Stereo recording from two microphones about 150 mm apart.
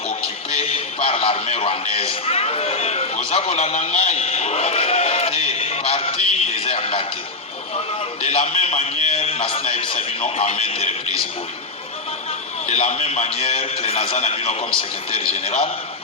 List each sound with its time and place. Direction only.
0.1 s a man's voice: 40° left (ahead or behind)
3.2 s a sound: 40° left (ahead or behind)
8.2 s a man's voice: 40° left (ahead or behind)
12.6 s a man's voice: 40° left (ahead or behind)